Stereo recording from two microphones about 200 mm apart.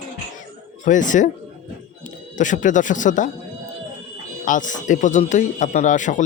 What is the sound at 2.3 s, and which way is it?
Speech, 40° left (ahead or behind).